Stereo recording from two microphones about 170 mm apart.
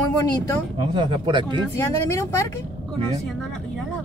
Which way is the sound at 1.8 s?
15° left (ahead or behind).